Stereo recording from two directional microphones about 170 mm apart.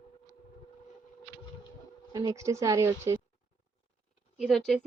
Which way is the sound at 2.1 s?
25° right (ahead or behind).